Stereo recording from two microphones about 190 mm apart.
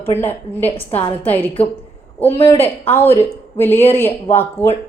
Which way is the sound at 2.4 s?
30° left (ahead or behind).